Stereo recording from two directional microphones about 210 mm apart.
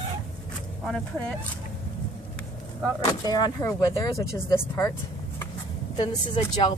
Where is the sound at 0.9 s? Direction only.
5° left (ahead or behind).